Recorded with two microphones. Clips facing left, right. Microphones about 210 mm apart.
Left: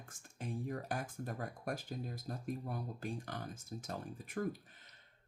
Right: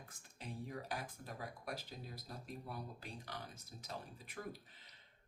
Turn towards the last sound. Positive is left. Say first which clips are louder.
# left 9 dB
turn(degrees=50)  # may be behind; listen again after turning